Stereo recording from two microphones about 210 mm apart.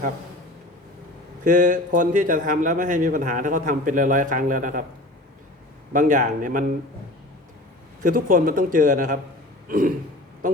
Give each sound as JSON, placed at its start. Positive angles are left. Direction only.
{"t": 1.5, "sound": "a man's voice", "side_deg": -40}
{"t": 5.9, "sound": "a man's voice", "side_deg": -40}
{"t": 8.0, "sound": "a man's voice", "side_deg": -40}
{"t": 9.6, "sound": "throat clearing", "side_deg": -40}